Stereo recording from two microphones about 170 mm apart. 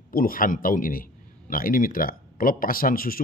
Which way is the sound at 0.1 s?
55° left (ahead or behind).